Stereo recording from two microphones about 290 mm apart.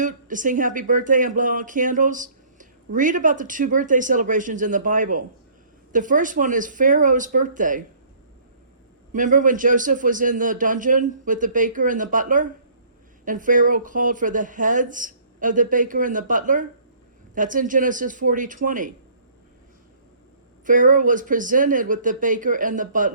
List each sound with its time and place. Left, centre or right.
0.0 s speech: right
9.1 s speech: right
20.7 s speech: right